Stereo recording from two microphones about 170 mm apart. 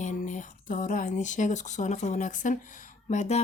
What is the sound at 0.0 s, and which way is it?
Speech, 45° left (ahead or behind).